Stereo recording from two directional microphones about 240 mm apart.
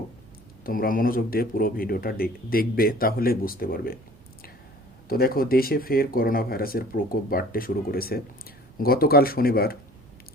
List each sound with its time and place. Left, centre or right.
0.6 s speech: left
5.0 s speech: left